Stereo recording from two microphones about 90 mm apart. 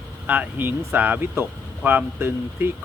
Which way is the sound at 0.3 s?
20° right (ahead or behind).